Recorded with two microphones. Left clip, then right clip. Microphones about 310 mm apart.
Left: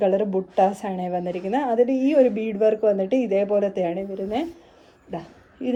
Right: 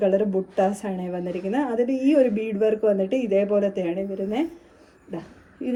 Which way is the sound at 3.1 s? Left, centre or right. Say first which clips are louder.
Left 2 dB; left.